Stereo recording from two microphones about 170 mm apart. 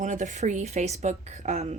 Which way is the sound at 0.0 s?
45° right (ahead or behind).